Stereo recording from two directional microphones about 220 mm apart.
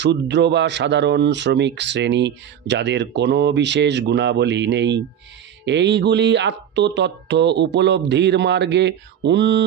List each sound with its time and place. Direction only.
0.0 s speech: 50° right (ahead or behind)